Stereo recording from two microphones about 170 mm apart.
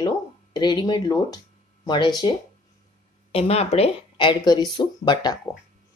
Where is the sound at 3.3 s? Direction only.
35° left (ahead or behind).